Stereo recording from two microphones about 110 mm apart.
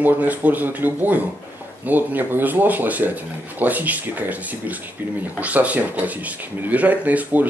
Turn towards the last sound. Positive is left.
turn(degrees=-15)  # may be behind; listen again after turning